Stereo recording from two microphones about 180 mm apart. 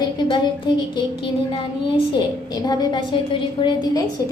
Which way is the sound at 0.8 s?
30° left (ahead or behind).